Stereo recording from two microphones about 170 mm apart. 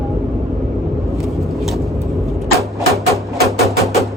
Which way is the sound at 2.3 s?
Centre (ahead or behind).